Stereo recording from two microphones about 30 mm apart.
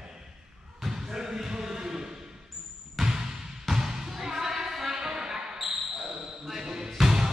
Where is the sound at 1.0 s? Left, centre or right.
Centre.